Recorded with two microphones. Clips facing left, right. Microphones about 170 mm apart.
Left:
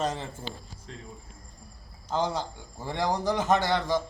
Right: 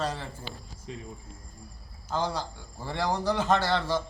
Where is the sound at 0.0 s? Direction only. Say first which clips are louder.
Left 2 dB; 20° left (ahead or behind).